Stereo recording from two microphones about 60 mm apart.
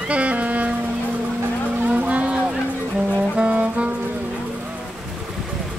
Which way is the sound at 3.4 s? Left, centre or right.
Centre.